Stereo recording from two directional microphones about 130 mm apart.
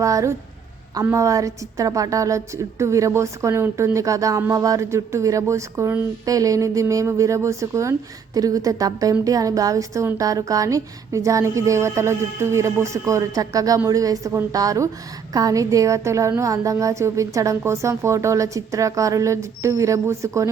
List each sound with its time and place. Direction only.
0.0 s a woman's voice: 25° right (ahead or behind)